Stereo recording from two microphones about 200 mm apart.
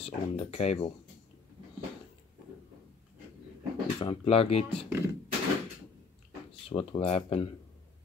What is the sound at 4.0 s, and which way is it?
Speech, 30° left (ahead or behind).